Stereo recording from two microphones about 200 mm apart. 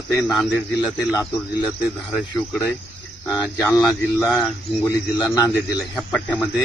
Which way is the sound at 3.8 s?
Centre (ahead or behind).